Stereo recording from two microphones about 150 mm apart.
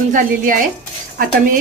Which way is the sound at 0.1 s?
60° right (ahead or behind).